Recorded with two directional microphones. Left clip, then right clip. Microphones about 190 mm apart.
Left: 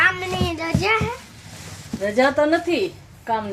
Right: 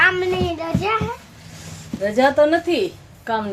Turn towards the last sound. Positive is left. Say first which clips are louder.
# right 2 dB
turn(degrees=0)  # may be behind; listen again after turning